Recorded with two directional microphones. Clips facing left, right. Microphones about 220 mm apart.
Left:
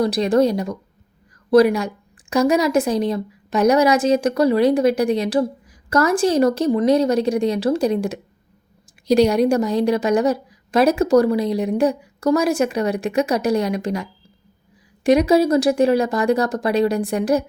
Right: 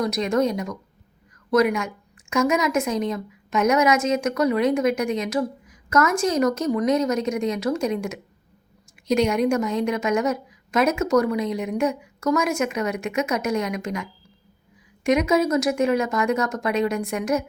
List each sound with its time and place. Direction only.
0.0 s a woman's voice: 30° left (ahead or behind)